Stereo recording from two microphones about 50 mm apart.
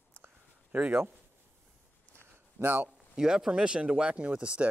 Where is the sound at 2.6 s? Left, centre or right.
Right.